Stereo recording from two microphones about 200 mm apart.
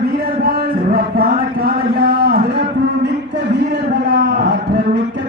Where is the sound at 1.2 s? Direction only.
50° right (ahead or behind).